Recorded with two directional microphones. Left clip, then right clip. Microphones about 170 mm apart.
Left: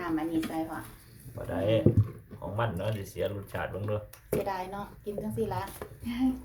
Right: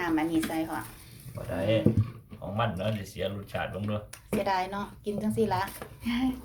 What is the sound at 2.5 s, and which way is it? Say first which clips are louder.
Speech: right 2 dB; 60° left (ahead or behind).